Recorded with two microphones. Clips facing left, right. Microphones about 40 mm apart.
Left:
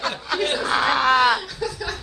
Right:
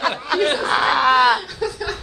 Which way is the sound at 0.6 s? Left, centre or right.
Centre.